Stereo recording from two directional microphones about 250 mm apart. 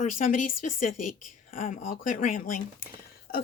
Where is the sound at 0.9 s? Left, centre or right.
Left.